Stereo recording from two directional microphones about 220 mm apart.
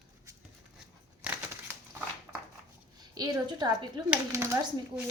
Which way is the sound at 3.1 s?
20° right (ahead or behind).